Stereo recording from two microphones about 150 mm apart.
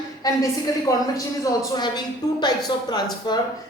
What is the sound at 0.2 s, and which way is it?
A woman's voice, 25° left (ahead or behind).